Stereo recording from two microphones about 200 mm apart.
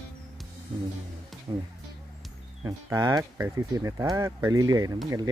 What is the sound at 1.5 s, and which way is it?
Speech, 20° right (ahead or behind).